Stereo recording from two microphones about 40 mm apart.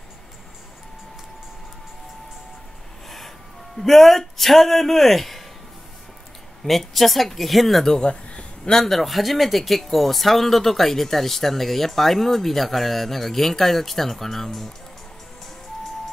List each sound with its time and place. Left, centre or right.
3.7 s speech: centre
6.6 s speech: centre
8.1 s a sound: left
8.7 s speech: centre